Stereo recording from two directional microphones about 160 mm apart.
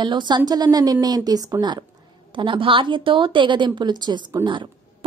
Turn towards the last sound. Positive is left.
turn(degrees=-30)  # may be behind; listen again after turning